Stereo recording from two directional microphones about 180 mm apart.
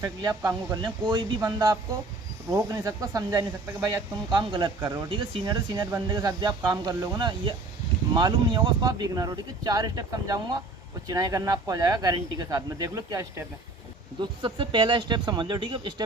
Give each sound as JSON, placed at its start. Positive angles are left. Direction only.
{"t": 0.0, "sound": "speech", "side_deg": -20}
{"t": 14.4, "sound": "speech", "side_deg": -25}